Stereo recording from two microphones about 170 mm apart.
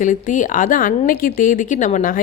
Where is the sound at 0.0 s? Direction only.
50° left (ahead or behind).